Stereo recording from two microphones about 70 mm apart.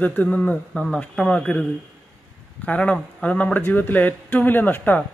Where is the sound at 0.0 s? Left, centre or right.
Left.